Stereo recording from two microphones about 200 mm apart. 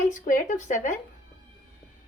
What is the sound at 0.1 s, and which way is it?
Speech, 40° left (ahead or behind).